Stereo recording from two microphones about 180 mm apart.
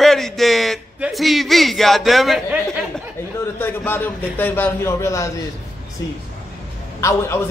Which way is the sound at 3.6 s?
10° left (ahead or behind).